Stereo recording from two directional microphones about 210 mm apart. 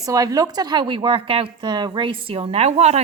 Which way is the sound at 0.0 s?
15° right (ahead or behind).